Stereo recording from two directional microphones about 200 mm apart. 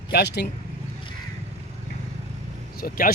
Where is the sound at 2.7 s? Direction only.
45° left (ahead or behind).